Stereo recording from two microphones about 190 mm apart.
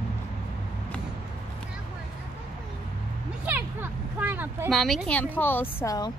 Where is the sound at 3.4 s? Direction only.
10° right (ahead or behind).